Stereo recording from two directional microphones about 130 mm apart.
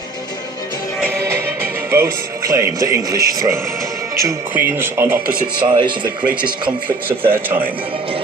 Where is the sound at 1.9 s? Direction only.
20° right (ahead or behind).